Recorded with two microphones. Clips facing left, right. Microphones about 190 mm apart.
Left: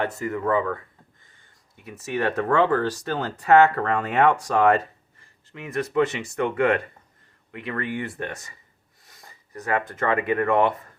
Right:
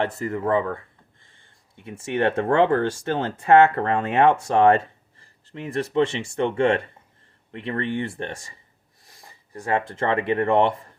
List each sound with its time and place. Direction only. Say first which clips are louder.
0.0 s speech: right 1 dB; 30° right (ahead or behind)